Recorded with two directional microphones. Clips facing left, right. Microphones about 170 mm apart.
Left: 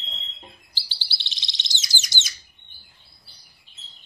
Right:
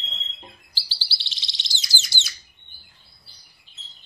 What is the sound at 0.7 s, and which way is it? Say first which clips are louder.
Bird: right 1 dB; 20° left (ahead or behind).